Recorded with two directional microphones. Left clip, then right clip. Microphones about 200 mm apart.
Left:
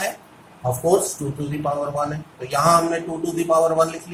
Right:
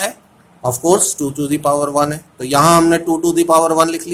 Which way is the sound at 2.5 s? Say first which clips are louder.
Right 6 dB; 55° right (ahead or behind).